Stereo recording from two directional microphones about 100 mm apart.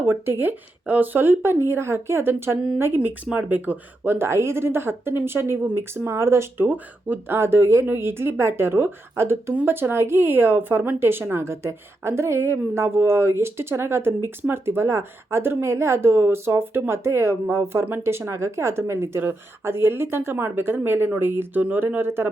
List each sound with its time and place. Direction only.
0.0 s speech: 20° right (ahead or behind)